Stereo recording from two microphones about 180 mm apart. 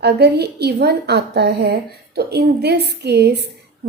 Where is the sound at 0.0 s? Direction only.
65° right (ahead or behind).